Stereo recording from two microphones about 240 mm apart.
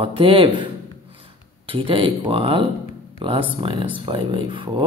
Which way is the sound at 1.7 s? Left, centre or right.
Right.